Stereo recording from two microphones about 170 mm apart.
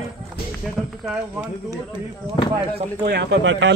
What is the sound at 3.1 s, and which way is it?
Speech, 80° right.